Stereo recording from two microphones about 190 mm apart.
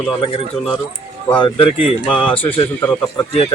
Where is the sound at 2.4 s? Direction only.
10° left (ahead or behind).